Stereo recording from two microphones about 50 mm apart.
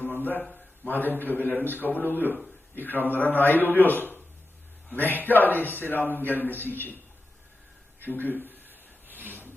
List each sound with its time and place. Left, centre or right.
0.0 s a man's voice: left
8.0 s a man's voice: left
9.0 s a sound: right